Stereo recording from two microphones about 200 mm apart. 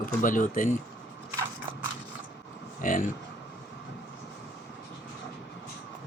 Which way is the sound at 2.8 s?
40° left (ahead or behind).